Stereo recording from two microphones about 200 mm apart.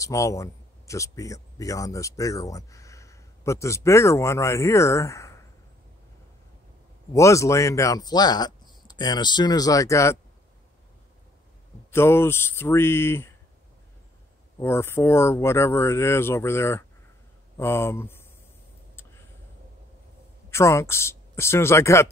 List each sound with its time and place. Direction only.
0.0 s speech: 15° left (ahead or behind)
7.2 s speech: 15° left (ahead or behind)
11.9 s speech: 10° left (ahead or behind)
14.6 s speech: 10° left (ahead or behind)
20.4 s speech: 15° left (ahead or behind)